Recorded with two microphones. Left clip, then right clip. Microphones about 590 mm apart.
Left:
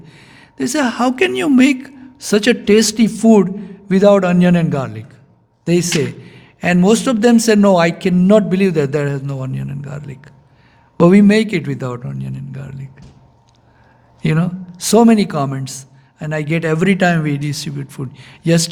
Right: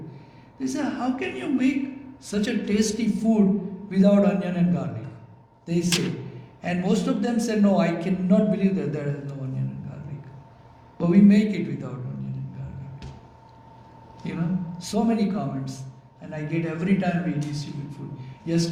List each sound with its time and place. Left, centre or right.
0.6 s a man's voice: left
10.9 s a man's voice: left
14.8 s a man's voice: left